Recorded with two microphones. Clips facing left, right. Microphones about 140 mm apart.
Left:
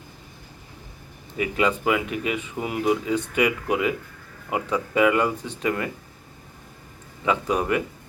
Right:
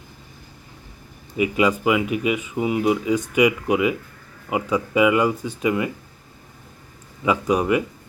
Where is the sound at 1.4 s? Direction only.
10° right (ahead or behind).